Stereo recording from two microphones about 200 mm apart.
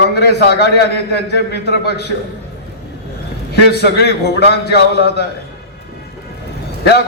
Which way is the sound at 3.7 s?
55° left (ahead or behind).